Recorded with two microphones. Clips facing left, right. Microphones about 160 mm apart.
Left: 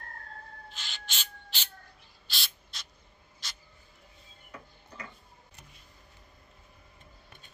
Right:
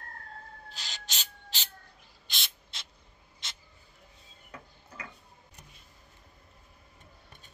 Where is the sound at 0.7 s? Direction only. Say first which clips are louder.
Even; 40° right (ahead or behind).